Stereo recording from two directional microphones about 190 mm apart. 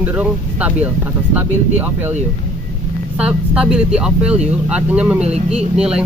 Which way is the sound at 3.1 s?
5° right (ahead or behind).